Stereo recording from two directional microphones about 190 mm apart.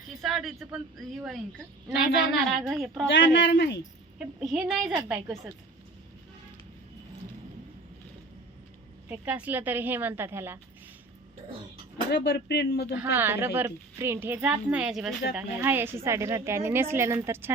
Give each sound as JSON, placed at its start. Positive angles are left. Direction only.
{"t": 0.2, "sound": "speech", "side_deg": 0}
{"t": 3.1, "sound": "speech", "side_deg": 65}
{"t": 4.2, "sound": "speech", "side_deg": -5}
{"t": 9.0, "sound": "speech", "side_deg": -10}
{"t": 12.1, "sound": "speech", "side_deg": 60}
{"t": 13.0, "sound": "speech", "side_deg": -10}